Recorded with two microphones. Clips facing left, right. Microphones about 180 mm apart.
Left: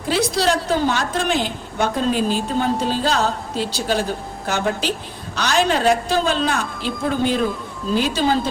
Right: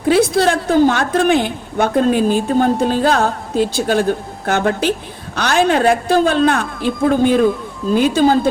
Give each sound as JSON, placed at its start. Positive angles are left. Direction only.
{"t": 0.1, "sound": "a woman's voice", "side_deg": -55}